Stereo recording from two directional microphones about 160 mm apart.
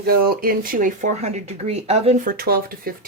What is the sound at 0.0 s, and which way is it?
Speech, 70° right (ahead or behind).